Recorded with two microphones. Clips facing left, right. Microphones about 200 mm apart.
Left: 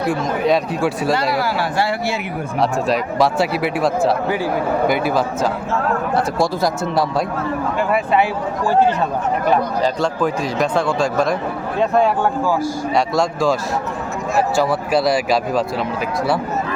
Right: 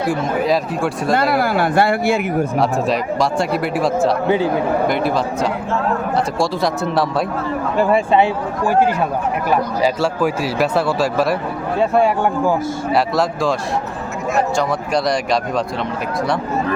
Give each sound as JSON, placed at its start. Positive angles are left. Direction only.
{"t": 0.4, "sound": "speech", "side_deg": 0}
{"t": 1.1, "sound": "speech", "side_deg": -55}
{"t": 2.6, "sound": "speech", "side_deg": 0}
{"t": 4.3, "sound": "speech", "side_deg": -20}
{"t": 4.9, "sound": "speech", "side_deg": 5}
{"t": 7.8, "sound": "speech", "side_deg": -30}
{"t": 9.8, "sound": "a man's voice", "side_deg": -10}
{"t": 12.9, "sound": "speech", "side_deg": 0}